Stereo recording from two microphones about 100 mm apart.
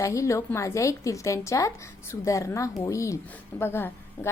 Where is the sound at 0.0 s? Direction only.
30° left (ahead or behind).